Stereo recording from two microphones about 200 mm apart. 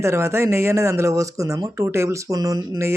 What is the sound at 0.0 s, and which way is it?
Speech, 15° right (ahead or behind).